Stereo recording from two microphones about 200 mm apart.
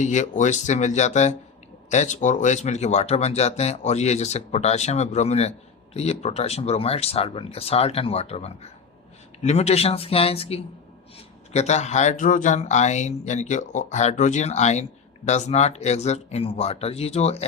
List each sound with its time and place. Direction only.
0.0 s speech: 35° left (ahead or behind)